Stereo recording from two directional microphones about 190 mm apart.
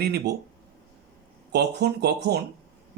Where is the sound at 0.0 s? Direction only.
60° right (ahead or behind).